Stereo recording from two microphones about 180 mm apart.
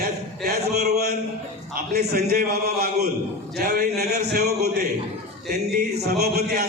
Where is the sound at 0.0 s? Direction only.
60° right (ahead or behind).